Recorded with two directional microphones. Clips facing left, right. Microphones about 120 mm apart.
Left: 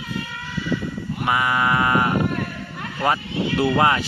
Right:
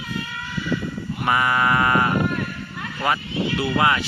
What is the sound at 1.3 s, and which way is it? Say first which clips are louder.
Speech: right 1 dB; 10° left (ahead or behind).